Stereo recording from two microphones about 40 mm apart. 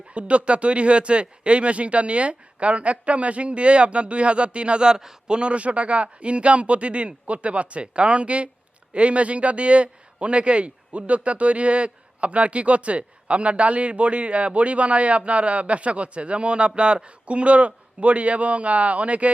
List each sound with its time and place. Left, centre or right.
0.1 s speech: right
5.4 s a man's voice: right